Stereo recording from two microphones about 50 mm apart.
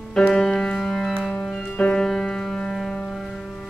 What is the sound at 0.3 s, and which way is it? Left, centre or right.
Music, centre.